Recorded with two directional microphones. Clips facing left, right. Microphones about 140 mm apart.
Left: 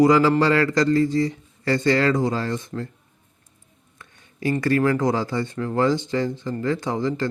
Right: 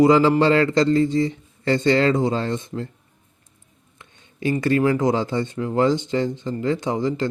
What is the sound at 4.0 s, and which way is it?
Speech, 20° right (ahead or behind).